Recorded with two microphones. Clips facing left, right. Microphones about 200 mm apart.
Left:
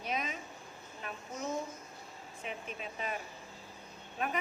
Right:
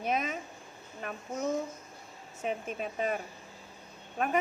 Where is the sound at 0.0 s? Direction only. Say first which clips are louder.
Right 6 dB; 50° right (ahead or behind).